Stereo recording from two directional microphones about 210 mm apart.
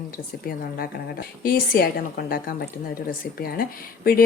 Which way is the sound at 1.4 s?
45° left (ahead or behind).